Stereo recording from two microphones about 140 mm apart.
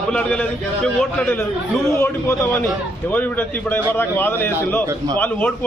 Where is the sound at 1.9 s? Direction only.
20° left (ahead or behind).